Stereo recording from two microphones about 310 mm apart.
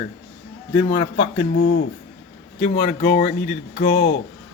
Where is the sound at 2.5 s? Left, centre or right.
Left.